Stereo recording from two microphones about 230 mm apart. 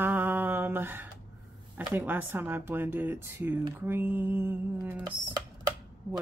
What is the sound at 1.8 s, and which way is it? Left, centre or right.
Speech, centre.